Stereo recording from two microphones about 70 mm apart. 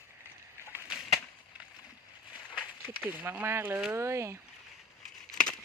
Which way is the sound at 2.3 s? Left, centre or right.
Left.